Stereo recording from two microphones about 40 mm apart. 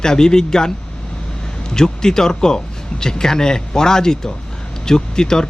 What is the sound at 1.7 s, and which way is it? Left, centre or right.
Speech, centre.